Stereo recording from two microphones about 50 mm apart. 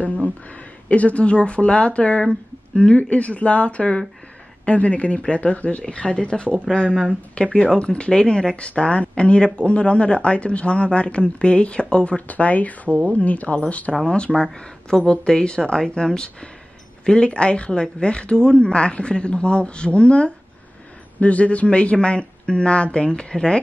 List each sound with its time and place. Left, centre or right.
0.5 s speech: left